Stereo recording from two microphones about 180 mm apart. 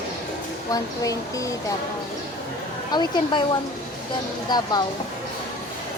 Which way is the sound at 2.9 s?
25° left (ahead or behind).